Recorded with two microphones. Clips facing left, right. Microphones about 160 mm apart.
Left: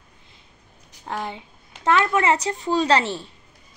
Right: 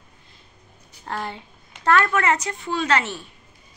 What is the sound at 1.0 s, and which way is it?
Speech, 10° left (ahead or behind).